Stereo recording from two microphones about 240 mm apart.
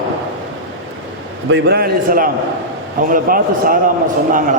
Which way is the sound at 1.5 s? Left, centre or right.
Right.